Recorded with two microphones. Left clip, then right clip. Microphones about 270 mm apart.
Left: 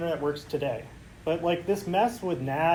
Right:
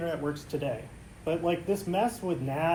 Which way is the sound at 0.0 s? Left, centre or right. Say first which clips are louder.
Left 4 dB; centre.